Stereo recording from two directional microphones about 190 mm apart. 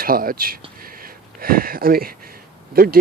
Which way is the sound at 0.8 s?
50° right (ahead or behind).